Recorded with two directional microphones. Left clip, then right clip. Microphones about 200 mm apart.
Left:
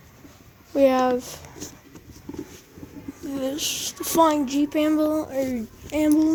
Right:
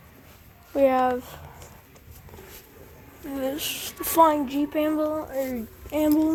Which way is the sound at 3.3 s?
10° left (ahead or behind).